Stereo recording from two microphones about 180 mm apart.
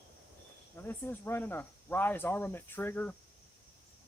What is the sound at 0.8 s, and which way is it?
Speech, 10° left (ahead or behind).